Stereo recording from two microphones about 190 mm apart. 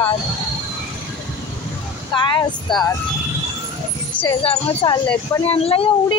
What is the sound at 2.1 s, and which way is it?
Speech, 25° left (ahead or behind).